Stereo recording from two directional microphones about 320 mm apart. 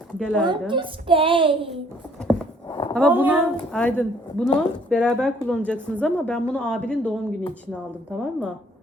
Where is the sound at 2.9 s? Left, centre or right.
Centre.